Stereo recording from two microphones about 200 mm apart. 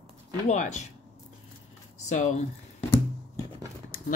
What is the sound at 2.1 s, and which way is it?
Speech, 35° left (ahead or behind).